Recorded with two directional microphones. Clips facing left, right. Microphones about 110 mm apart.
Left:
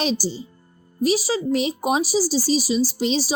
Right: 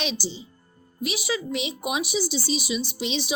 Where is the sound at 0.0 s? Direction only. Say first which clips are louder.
Left 6 dB; 40° left (ahead or behind).